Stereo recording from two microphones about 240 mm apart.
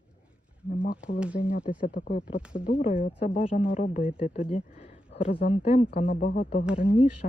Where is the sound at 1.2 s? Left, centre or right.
Centre.